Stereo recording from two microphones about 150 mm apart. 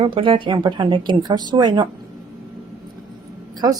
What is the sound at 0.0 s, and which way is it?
Speech, 35° right (ahead or behind).